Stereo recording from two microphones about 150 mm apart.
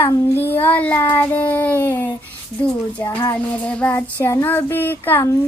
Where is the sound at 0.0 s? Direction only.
15° left (ahead or behind).